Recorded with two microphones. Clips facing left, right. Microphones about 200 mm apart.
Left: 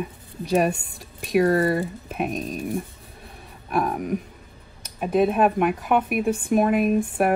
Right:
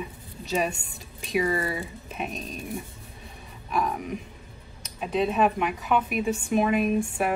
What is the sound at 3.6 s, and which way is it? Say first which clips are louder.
Speech: left 4 dB; 55° left (ahead or behind).